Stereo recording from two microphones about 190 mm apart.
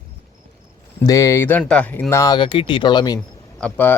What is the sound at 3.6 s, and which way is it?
Speech, 10° left (ahead or behind).